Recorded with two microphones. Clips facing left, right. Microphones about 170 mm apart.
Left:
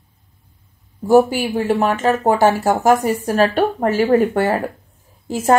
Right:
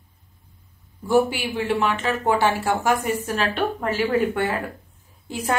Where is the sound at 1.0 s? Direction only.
40° left (ahead or behind).